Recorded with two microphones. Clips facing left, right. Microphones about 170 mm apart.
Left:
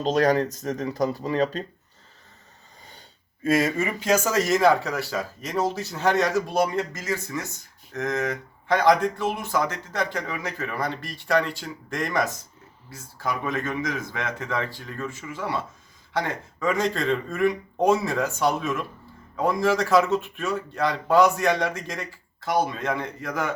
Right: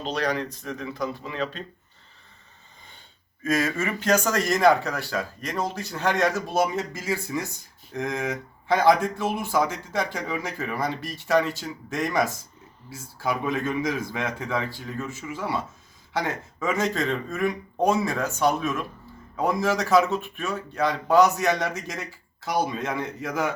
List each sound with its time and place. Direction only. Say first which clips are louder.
0.0 s speech: left 6 dB; 45° left (ahead or behind)
3.4 s a man's voice: left 3 dB; 25° left (ahead or behind); by 23.6 s 5° right (ahead or behind)